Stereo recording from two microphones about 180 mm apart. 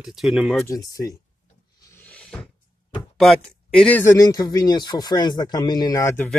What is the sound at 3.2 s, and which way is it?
Speech, 5° left (ahead or behind).